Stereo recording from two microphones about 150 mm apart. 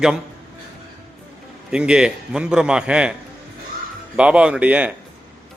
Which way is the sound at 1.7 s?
5° right (ahead or behind).